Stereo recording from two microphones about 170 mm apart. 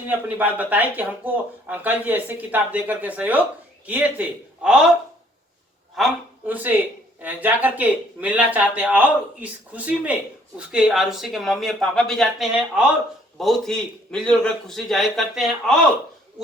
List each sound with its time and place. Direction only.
0.1 s speech: 10° right (ahead or behind)
6.0 s a man's voice: centre (ahead or behind)